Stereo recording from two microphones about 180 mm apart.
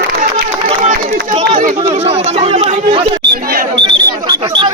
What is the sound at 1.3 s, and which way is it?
Speech, 35° right (ahead or behind).